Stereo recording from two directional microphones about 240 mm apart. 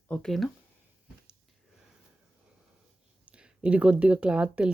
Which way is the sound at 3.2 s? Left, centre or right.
Centre.